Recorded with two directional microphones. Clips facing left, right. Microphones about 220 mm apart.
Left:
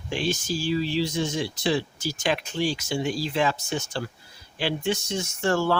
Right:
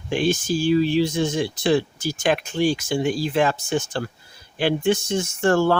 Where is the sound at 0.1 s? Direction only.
55° right (ahead or behind).